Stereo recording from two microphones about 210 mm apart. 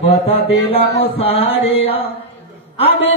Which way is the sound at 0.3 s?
25° left (ahead or behind).